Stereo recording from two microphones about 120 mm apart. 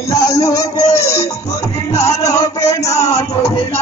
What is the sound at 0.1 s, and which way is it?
Music, 30° left (ahead or behind).